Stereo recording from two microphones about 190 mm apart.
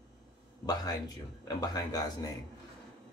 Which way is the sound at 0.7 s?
20° left (ahead or behind).